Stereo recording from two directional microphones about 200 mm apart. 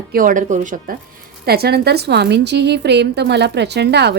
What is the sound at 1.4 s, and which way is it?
A woman's voice, 50° right (ahead or behind).